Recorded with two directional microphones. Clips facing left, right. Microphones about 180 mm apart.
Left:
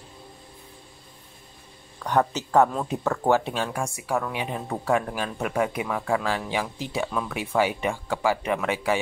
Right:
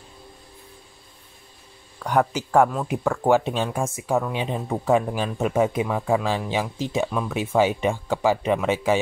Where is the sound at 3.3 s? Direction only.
15° right (ahead or behind).